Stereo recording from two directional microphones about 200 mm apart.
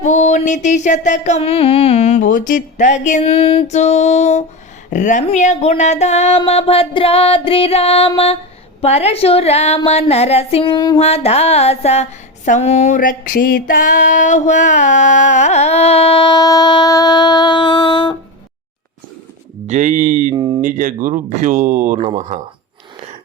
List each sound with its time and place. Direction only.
0.0 s female singing: 35° left (ahead or behind)
4.9 s a sound: 40° left (ahead or behind)
8.8 s female singing: 30° left (ahead or behind)
19.6 s speech: 35° right (ahead or behind)
20.3 s speech: 20° right (ahead or behind)
20.6 s speech: 40° right (ahead or behind)